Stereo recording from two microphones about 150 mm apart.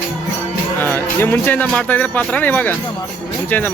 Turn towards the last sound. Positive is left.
turn(degrees=10)  # may be behind; listen again after turning